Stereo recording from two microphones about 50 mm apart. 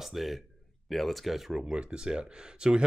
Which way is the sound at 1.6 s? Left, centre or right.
Centre.